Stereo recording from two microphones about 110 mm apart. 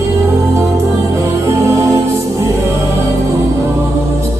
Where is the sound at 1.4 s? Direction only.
25° right (ahead or behind).